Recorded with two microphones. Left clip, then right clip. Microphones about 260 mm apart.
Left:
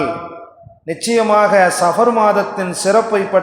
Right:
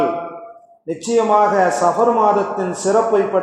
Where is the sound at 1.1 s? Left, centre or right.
Left.